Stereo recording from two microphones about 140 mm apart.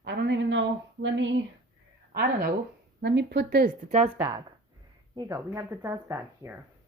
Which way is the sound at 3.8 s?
55° right (ahead or behind).